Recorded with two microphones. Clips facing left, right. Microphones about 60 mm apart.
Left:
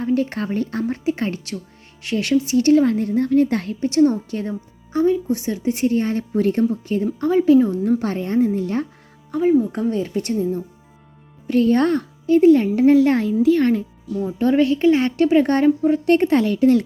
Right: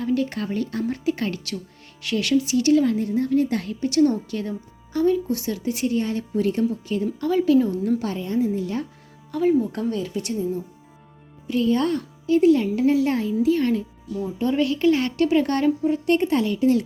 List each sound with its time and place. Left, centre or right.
0.0 s a woman's voice: left
9.3 s speech: centre
9.9 s a woman's voice: left